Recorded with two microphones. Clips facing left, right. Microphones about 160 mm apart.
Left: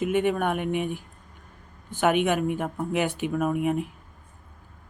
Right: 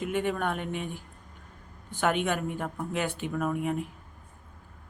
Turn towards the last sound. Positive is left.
turn(degrees=15)  # may be behind; listen again after turning